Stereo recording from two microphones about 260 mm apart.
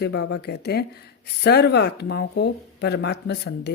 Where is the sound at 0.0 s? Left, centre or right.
Left.